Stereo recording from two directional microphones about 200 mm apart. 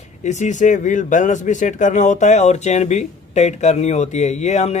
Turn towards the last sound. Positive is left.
turn(degrees=35)  # may be behind; listen again after turning